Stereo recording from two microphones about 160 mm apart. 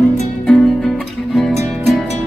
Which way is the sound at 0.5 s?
5° left (ahead or behind).